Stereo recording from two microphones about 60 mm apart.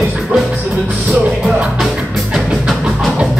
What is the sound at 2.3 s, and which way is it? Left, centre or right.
Music, centre.